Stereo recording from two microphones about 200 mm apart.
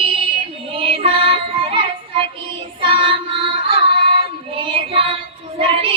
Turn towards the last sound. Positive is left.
turn(degrees=-25)  # may be behind; listen again after turning